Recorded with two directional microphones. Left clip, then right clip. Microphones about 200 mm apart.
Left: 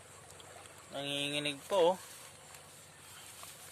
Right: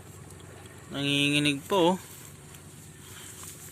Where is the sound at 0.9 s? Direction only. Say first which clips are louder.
Right 10 dB; 5° left (ahead or behind).